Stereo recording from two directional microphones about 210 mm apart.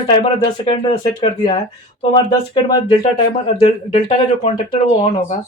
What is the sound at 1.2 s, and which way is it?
Speech, 25° left (ahead or behind).